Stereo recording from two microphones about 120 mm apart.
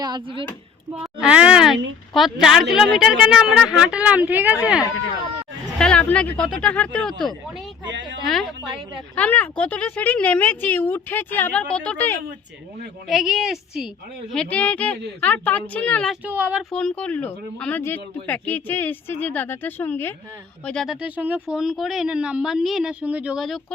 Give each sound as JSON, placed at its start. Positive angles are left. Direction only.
{"t": 0.0, "sound": "speech", "side_deg": -40}
{"t": 1.0, "sound": "speech", "side_deg": -10}
{"t": 5.8, "sound": "speech", "side_deg": 10}
{"t": 8.3, "sound": "speech", "side_deg": 0}
{"t": 9.1, "sound": "speech", "side_deg": 10}
{"t": 13.1, "sound": "speech", "side_deg": 0}
{"t": 14.3, "sound": "speech", "side_deg": 10}
{"t": 16.2, "sound": "speech", "side_deg": -15}
{"t": 16.7, "sound": "speech", "side_deg": 10}
{"t": 20.7, "sound": "speech", "side_deg": 0}